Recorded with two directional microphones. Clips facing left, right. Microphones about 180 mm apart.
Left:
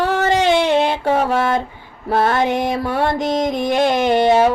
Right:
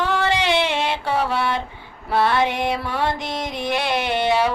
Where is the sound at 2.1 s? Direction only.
45° left (ahead or behind).